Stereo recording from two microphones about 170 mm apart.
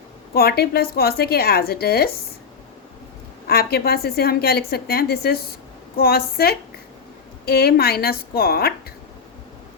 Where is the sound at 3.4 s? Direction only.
65° left (ahead or behind).